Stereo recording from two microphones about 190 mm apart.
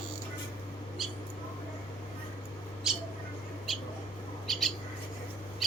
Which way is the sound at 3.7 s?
Centre (ahead or behind).